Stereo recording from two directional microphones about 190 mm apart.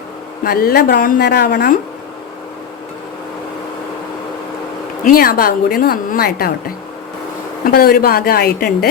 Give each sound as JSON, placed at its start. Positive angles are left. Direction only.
{"t": 0.4, "sound": "a woman's voice", "side_deg": 50}
{"t": 5.0, "sound": "a woman's voice", "side_deg": 50}